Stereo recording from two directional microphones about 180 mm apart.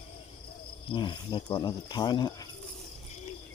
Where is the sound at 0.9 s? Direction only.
25° left (ahead or behind).